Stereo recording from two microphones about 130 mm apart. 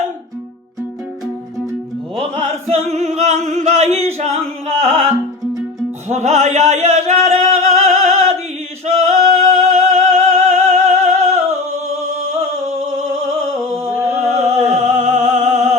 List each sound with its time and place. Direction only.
2.1 s music: 55° right (ahead or behind)
2.6 s singing: 60° right (ahead or behind)
6.1 s a sound: 60° right (ahead or behind)
8.9 s singing: 55° right (ahead or behind)
13.8 s music: 20° right (ahead or behind)
14.3 s music: 60° right (ahead or behind)